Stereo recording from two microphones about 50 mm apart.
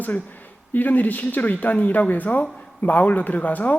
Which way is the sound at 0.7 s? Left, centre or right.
Left.